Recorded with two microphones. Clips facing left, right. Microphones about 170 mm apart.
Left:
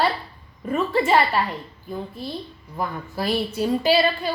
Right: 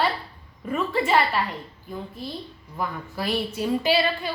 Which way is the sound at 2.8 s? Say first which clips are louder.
Left 2 dB; 35° left (ahead or behind).